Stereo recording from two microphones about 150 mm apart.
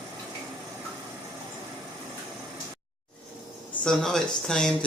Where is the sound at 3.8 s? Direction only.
5° left (ahead or behind).